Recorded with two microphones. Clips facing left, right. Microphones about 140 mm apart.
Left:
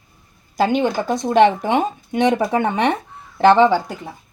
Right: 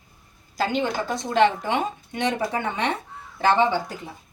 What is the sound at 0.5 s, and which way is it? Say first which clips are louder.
Speech: left 6 dB; 55° left (ahead or behind).